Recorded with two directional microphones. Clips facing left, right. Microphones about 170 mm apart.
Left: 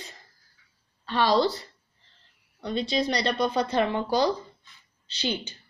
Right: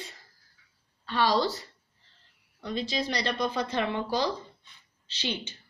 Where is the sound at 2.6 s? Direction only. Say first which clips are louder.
Left 4 dB; 35° left (ahead or behind).